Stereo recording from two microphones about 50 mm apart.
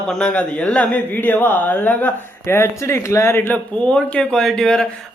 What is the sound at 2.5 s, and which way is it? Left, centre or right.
Speech, left.